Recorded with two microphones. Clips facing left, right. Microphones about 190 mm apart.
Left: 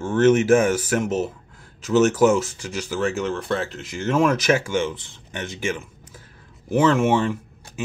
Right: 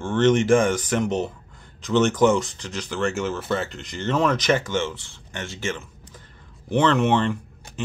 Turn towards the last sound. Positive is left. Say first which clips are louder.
# even
turn(degrees=5)  # may be behind; listen again after turning